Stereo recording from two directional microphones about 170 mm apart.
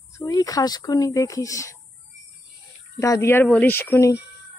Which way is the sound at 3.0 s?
15° left (ahead or behind).